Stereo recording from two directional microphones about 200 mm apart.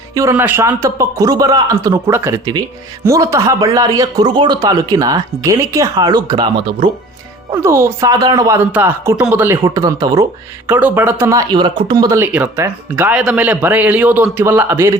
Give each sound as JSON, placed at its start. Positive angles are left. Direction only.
{"t": 0.1, "sound": "a man's voice", "side_deg": -15}